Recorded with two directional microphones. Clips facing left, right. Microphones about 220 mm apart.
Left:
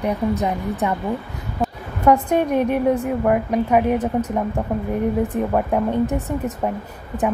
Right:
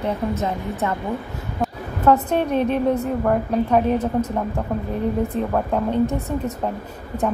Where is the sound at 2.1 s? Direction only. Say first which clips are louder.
Left 1 dB; 10° left (ahead or behind).